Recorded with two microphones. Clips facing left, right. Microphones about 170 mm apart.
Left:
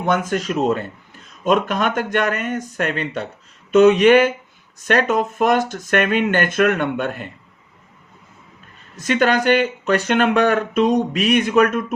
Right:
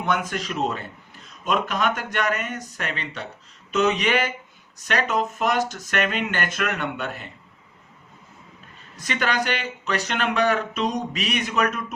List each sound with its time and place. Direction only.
0.0 s speech: 45° left (ahead or behind)
9.0 s speech: 45° left (ahead or behind)